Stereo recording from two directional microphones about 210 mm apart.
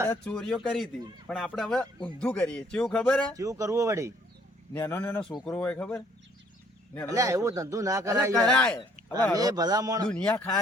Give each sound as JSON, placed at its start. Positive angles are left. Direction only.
{"t": 0.1, "sound": "speech", "side_deg": 5}
{"t": 3.3, "sound": "speech", "side_deg": -15}
{"t": 4.7, "sound": "speech", "side_deg": 10}
{"t": 7.1, "sound": "speech", "side_deg": -15}
{"t": 8.4, "sound": "speech", "side_deg": 5}
{"t": 9.3, "sound": "speech", "side_deg": -15}
{"t": 10.1, "sound": "speech", "side_deg": 5}